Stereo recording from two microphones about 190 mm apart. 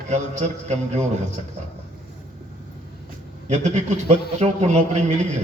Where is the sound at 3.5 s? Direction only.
40° right (ahead or behind).